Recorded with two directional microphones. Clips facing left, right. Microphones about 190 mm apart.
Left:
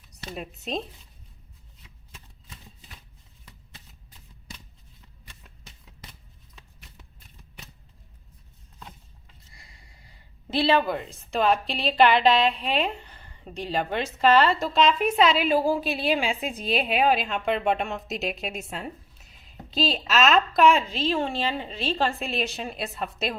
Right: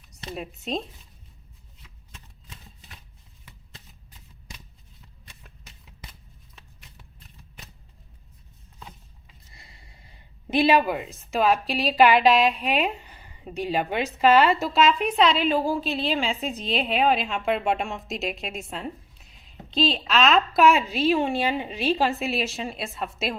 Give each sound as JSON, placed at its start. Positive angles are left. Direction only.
{"t": 0.3, "sound": "a woman's voice", "side_deg": 0}
{"t": 9.5, "sound": "a sound", "side_deg": -25}
{"t": 11.3, "sound": "a woman's voice", "side_deg": -5}